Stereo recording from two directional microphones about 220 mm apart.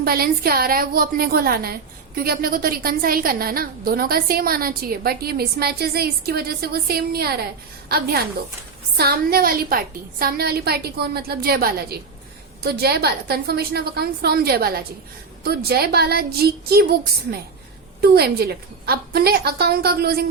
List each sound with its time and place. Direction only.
0.0 s a woman's voice: 45° right (ahead or behind)
18.0 s a woman's voice: 45° right (ahead or behind)